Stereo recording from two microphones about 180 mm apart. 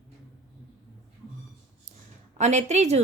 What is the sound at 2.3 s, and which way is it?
Speech, 40° right (ahead or behind).